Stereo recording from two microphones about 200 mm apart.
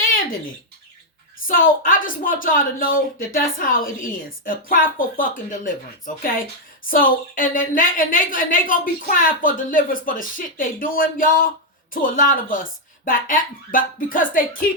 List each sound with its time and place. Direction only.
1.5 s a woman's voice: 45° left (ahead or behind)